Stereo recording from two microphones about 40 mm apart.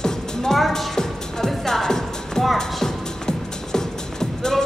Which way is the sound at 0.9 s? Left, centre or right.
Centre.